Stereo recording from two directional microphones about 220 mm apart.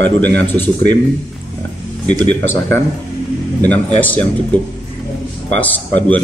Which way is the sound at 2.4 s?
10° left (ahead or behind).